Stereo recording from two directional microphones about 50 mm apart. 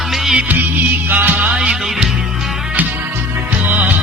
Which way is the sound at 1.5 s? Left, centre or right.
Centre.